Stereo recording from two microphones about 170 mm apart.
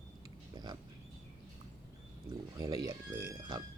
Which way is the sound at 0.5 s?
25° right (ahead or behind).